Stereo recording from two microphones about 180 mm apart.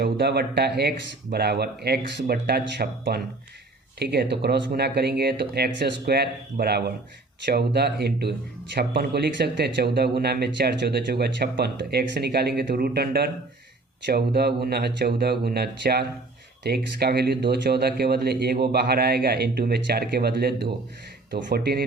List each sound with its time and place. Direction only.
0.0 s speech: 65° right (ahead or behind)